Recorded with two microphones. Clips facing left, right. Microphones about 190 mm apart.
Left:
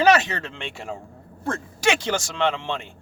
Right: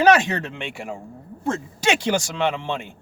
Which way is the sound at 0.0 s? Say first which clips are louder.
Right 2 dB; 15° right (ahead or behind).